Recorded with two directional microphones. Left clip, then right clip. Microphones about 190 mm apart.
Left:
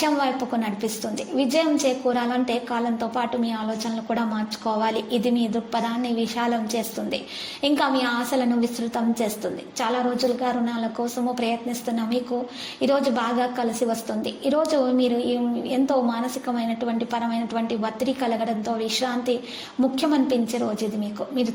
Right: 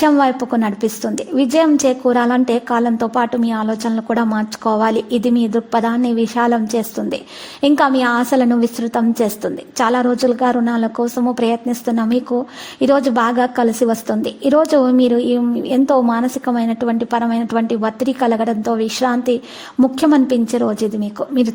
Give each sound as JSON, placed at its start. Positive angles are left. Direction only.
{"t": 0.0, "sound": "a woman's voice", "side_deg": -50}